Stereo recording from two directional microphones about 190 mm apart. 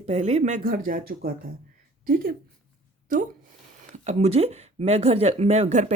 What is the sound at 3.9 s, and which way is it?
Speech, 35° right (ahead or behind).